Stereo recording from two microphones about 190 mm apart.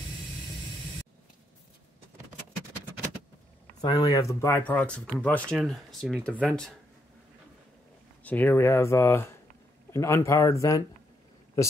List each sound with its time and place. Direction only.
3.8 s speech: 20° left (ahead or behind); by 6.7 s 5° left (ahead or behind)
8.2 s speech: 10° left (ahead or behind)